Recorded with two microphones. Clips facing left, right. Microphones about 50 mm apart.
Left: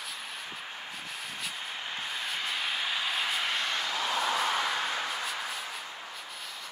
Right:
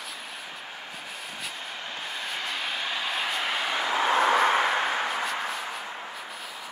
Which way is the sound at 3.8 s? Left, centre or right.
Right.